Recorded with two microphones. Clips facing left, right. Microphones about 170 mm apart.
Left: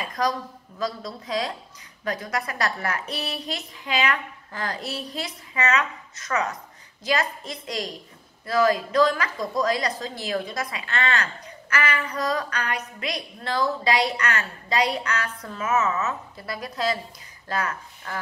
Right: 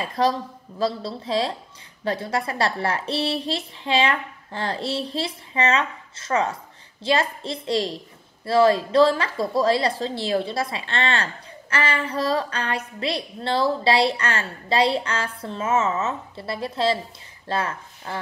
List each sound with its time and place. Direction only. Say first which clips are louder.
0.0 s a woman's voice: right 4 dB; 30° right (ahead or behind)